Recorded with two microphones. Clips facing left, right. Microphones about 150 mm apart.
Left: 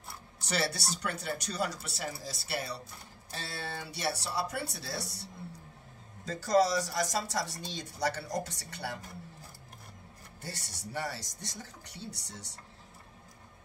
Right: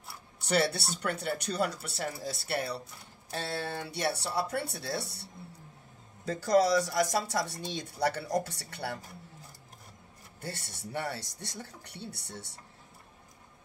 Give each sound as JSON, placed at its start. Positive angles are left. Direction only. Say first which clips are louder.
{"t": 0.4, "sound": "speech", "louder": "right 5 dB", "side_deg": -55}
{"t": 10.4, "sound": "speech", "louder": "right 3 dB", "side_deg": -55}